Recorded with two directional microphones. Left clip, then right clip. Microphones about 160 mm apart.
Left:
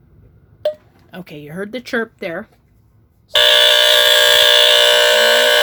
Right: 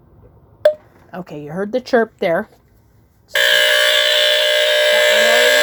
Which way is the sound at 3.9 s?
35° left (ahead or behind).